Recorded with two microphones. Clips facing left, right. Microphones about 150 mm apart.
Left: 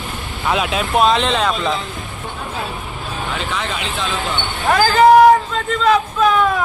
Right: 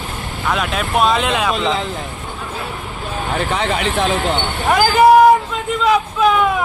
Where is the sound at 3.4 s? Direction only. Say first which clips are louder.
Right 8 dB; 65° right (ahead or behind).